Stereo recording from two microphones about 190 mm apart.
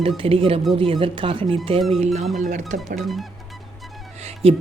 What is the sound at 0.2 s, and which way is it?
Speech, 30° right (ahead or behind).